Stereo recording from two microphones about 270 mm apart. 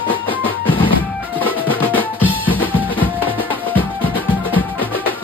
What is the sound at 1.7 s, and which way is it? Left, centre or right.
Drum, centre.